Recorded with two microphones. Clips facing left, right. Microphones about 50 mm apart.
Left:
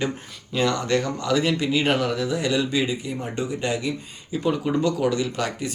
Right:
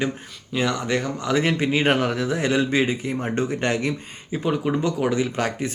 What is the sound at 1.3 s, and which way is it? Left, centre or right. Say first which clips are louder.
Speech: right 1 dB; right.